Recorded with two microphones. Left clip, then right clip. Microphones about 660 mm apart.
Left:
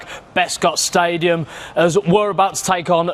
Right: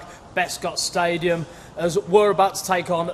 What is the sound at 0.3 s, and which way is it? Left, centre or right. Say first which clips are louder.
Speech: left 7 dB; left.